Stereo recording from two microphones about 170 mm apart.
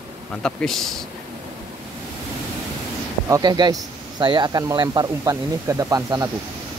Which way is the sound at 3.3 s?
25° right (ahead or behind).